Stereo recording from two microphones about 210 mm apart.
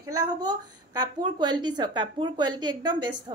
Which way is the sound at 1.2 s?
20° right (ahead or behind).